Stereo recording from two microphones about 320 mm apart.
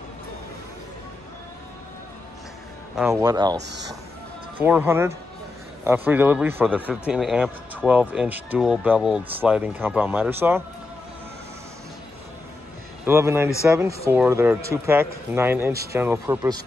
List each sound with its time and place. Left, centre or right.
3.0 s speech: centre
3.5 s speech: right
4.6 s speech: centre
13.0 s speech: centre